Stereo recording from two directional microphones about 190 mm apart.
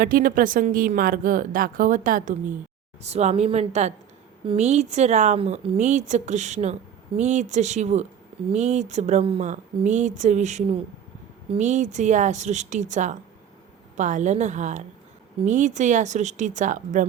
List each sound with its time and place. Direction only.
0.0 s a woman's voice: 45° right (ahead or behind)